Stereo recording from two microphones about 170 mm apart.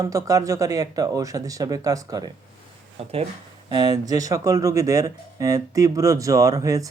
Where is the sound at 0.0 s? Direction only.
20° right (ahead or behind).